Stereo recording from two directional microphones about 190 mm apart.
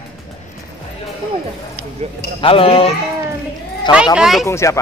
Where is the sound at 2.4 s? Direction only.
30° left (ahead or behind).